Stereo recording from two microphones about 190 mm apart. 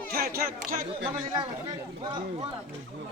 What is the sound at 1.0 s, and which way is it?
A man's voice, 25° right (ahead or behind).